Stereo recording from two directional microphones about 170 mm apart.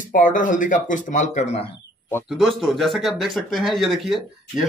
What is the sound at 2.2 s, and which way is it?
Speech, centre (ahead or behind).